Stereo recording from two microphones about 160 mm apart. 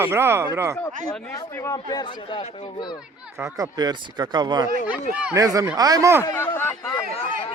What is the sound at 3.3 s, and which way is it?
Speech, 20° right (ahead or behind).